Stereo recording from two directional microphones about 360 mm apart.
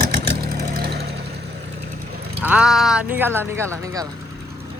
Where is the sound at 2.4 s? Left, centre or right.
Centre.